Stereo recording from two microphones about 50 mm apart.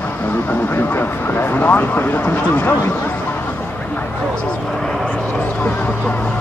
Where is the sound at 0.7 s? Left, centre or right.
Left.